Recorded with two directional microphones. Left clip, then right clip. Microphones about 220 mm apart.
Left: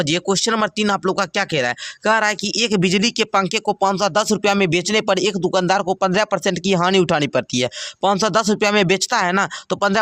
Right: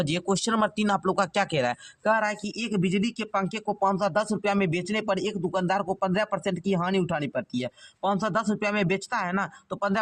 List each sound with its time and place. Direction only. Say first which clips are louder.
0.0 s speech: left 8 dB; 25° left (ahead or behind)
2.0 s speech: left 7 dB; 30° left (ahead or behind)